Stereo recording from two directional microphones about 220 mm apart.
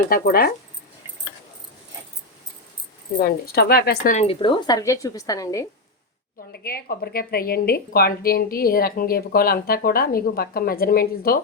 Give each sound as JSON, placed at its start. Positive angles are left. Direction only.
{"t": 0.1, "sound": "a woman's voice", "side_deg": 40}
{"t": 3.2, "sound": "speech", "side_deg": 45}
{"t": 6.5, "sound": "a woman's voice", "side_deg": 45}